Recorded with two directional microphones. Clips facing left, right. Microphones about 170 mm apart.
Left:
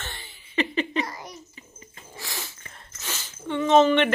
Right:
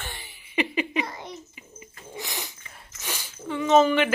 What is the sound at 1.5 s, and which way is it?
Bird, 15° right (ahead or behind).